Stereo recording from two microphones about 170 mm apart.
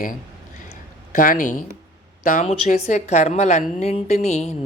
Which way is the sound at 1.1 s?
55° left (ahead or behind).